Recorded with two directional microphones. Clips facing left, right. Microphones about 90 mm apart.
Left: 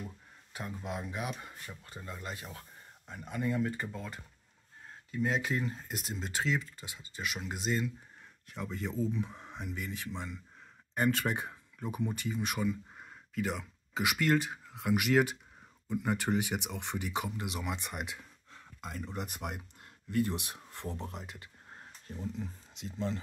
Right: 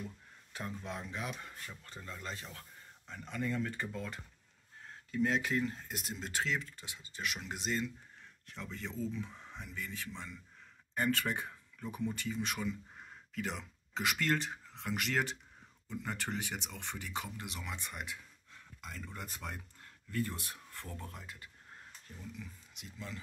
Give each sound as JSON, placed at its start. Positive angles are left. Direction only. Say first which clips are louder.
{"t": 0.5, "sound": "speech", "louder": "left 2 dB", "side_deg": 10}
{"t": 22.0, "sound": "speech", "louder": "left 9 dB", "side_deg": 35}